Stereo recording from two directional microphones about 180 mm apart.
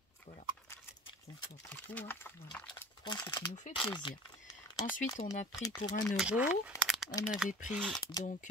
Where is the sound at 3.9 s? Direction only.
25° left (ahead or behind).